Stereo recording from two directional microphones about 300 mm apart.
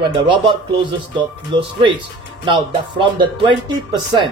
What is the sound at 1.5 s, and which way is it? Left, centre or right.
Speech, centre.